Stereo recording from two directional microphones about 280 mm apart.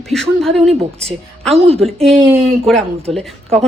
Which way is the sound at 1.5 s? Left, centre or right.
Right.